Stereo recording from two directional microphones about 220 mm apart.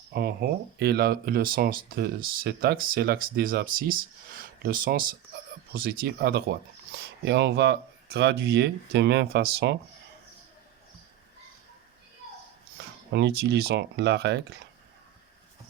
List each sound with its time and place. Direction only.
0.1 s speech: 45° right (ahead or behind)
13.1 s speech: 50° right (ahead or behind)